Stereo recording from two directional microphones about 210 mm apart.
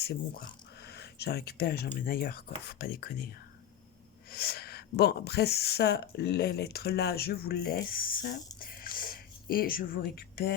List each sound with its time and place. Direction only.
0.8 s speech: 50° left (ahead or behind)
4.3 s speech: 50° left (ahead or behind)